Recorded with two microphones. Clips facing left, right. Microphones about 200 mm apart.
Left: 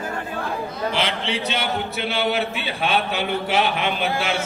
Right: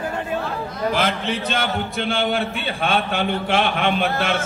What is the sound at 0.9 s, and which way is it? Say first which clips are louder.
Speech: right 4 dB; 50° right (ahead or behind).